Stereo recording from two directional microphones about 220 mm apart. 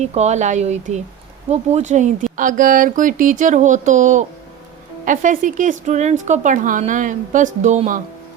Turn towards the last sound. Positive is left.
turn(degrees=-35)  # may be behind; listen again after turning